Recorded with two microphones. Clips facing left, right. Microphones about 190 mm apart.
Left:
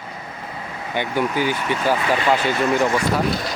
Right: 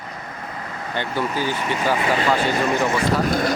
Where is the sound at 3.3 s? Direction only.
50° right (ahead or behind).